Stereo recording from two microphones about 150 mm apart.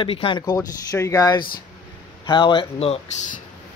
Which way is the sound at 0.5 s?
20° left (ahead or behind).